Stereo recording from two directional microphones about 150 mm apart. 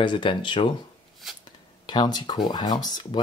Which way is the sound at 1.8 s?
30° left (ahead or behind).